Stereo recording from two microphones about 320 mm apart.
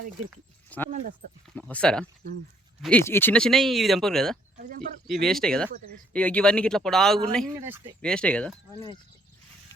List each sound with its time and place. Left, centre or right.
0.3 s speech: centre
0.9 s speech: right
1.5 s speech: centre
8.0 s speech: centre